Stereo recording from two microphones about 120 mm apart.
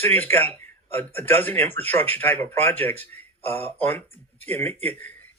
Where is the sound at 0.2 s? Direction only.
15° left (ahead or behind).